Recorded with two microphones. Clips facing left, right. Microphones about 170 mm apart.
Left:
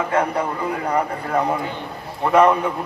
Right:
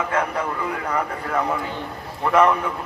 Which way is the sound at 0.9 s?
30° left (ahead or behind).